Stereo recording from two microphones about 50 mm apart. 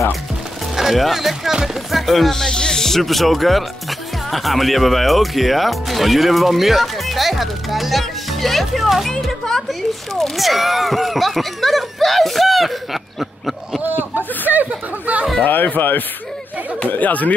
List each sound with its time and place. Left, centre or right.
0.7 s speech: centre
2.4 s speech: centre
14.7 s chatter: right
15.4 s speech: left